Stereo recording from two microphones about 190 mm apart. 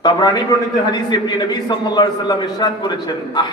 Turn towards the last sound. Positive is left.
turn(degrees=20)  # may be behind; listen again after turning